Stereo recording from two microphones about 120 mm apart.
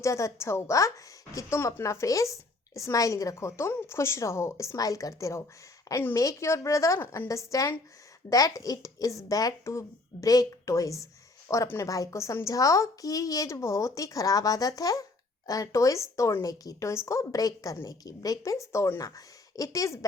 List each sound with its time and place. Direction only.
0.0 s a woman's voice: 25° left (ahead or behind)